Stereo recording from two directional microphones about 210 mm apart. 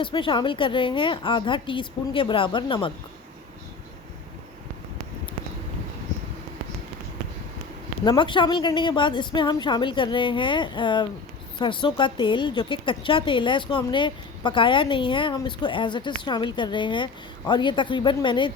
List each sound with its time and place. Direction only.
0.0 s a woman's voice: 25° left (ahead or behind)
8.0 s a woman's voice: 20° left (ahead or behind)